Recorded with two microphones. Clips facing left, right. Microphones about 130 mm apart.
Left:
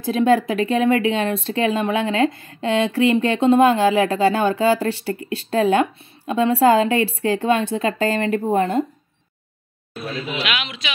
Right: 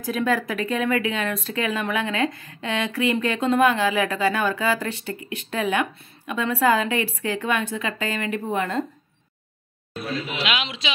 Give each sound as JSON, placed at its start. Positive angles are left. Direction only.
{"t": 0.0, "sound": "speech", "side_deg": 30}
{"t": 10.4, "sound": "a woman's voice", "side_deg": -30}